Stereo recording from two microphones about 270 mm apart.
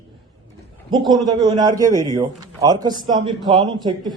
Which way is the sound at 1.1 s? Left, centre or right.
Centre.